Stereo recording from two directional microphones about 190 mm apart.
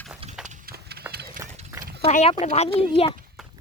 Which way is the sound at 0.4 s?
45° right (ahead or behind).